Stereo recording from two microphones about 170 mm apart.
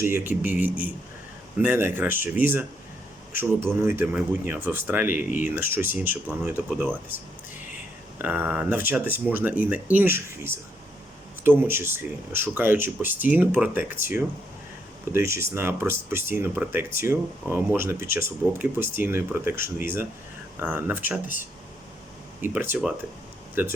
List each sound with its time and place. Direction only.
0.0 s speech: 10° right (ahead or behind)
3.8 s speech: 10° right (ahead or behind)
8.2 s speech: 10° right (ahead or behind)
22.4 s speech: 10° right (ahead or behind)